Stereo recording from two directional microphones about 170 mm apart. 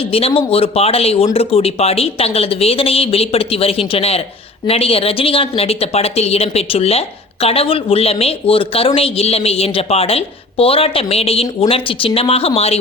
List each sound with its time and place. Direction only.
0.0 s speech: 35° left (ahead or behind)